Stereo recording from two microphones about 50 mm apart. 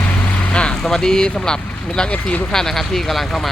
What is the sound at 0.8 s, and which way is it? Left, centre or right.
Speech, centre.